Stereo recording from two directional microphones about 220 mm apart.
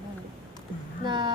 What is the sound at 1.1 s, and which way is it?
Speech, 20° right (ahead or behind).